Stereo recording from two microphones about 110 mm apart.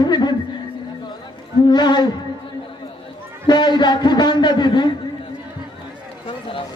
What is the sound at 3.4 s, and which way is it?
A man's voice, 45° left (ahead or behind).